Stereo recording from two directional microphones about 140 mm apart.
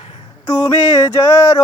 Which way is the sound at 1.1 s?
25° left (ahead or behind).